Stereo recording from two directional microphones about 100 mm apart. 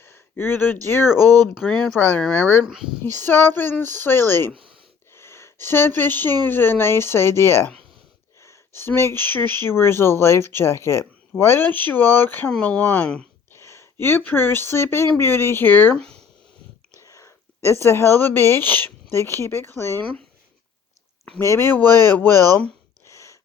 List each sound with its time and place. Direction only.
0.0 s a sound: 20° left (ahead or behind)
1.6 s speech: 20° left (ahead or behind)
2.6 s speech: 5° right (ahead or behind)
3.0 s speech: 20° left (ahead or behind)
8.4 s a sound: 25° left (ahead or behind)
9.1 s speech: 20° left (ahead or behind)
17.1 s speech: 30° left (ahead or behind)
21.3 s speech: 25° left (ahead or behind)
23.0 s a sound: 30° left (ahead or behind)